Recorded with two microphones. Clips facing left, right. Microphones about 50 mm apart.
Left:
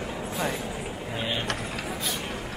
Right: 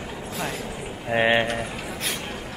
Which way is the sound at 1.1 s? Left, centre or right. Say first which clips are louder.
Right 12 dB; right.